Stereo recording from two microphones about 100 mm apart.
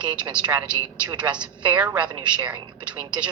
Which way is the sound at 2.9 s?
10° right (ahead or behind).